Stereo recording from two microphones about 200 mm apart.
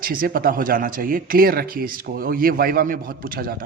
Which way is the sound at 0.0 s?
45° right (ahead or behind).